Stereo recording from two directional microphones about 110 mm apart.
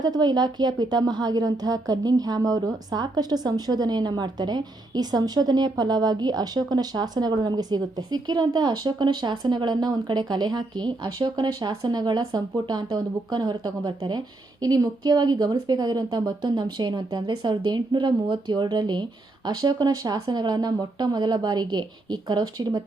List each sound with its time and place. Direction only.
0.0 s a woman's voice: 40° right (ahead or behind)